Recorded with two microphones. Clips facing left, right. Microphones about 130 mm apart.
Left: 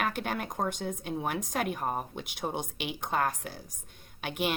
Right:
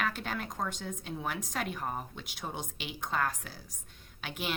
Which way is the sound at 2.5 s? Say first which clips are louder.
Left 5 dB; 55° left (ahead or behind).